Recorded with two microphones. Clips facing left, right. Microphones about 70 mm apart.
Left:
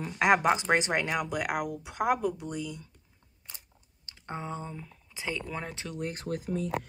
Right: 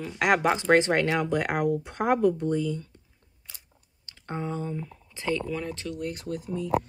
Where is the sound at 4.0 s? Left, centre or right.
Centre.